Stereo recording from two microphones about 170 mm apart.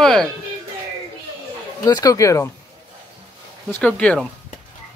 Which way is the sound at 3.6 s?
10° left (ahead or behind).